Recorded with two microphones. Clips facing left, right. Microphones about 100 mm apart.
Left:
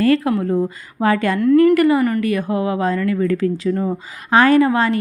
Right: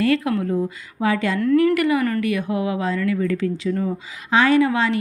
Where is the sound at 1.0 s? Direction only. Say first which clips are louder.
Left 4 dB; 50° left (ahead or behind).